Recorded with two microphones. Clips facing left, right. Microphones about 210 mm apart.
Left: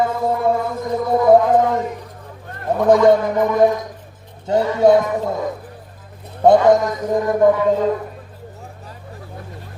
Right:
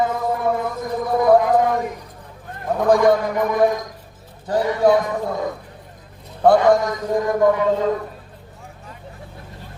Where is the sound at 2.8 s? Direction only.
20° left (ahead or behind).